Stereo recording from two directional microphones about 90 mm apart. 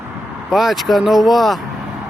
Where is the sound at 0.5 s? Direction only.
Centre (ahead or behind).